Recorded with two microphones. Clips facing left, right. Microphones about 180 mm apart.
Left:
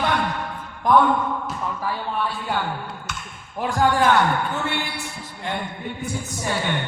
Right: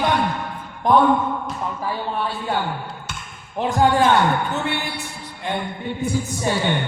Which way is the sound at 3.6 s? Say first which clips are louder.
Right 3 dB; 20° right (ahead or behind).